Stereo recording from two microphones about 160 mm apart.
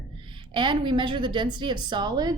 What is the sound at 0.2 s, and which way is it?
A woman's voice, 30° right (ahead or behind).